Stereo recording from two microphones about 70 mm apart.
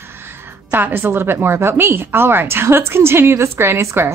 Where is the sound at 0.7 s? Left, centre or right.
Right.